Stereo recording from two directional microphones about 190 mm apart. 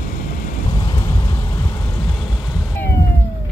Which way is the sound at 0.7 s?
20° left (ahead or behind).